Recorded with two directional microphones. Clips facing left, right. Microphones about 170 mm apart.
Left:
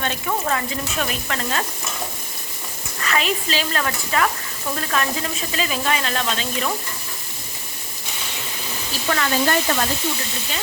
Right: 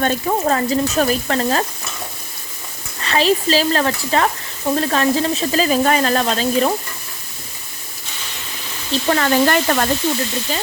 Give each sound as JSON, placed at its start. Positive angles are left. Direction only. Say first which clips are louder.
{"t": 0.0, "sound": "sizzle", "louder": "right 6 dB", "side_deg": -40}
{"t": 3.0, "sound": "sizzle", "louder": "right 7 dB", "side_deg": -30}
{"t": 8.9, "sound": "sizzle", "louder": "right 6 dB", "side_deg": -35}
{"t": 9.3, "sound": "speech", "louder": "right 5 dB", "side_deg": -60}